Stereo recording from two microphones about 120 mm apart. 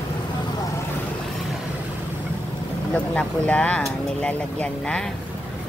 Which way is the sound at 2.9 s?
10° left (ahead or behind).